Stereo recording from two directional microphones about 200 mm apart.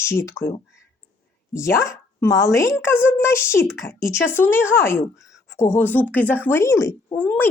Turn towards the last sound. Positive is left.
turn(degrees=10)  # may be behind; listen again after turning